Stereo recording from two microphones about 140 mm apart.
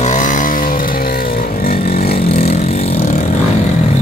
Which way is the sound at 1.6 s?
90° left.